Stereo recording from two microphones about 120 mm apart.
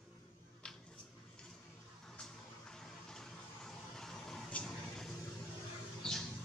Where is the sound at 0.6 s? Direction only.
10° left (ahead or behind).